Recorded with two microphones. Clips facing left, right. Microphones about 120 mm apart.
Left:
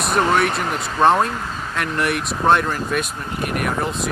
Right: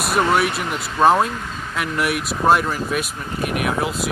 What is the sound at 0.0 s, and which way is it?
Speech, 5° right (ahead or behind).